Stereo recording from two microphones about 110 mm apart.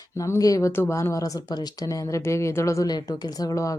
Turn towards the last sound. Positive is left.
turn(degrees=30)  # may be behind; listen again after turning